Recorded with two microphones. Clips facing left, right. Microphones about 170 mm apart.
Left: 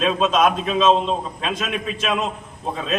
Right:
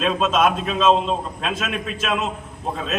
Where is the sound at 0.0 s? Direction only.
5° right (ahead or behind).